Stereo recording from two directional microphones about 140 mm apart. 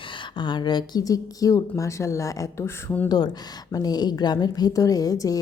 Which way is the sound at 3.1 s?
30° left (ahead or behind).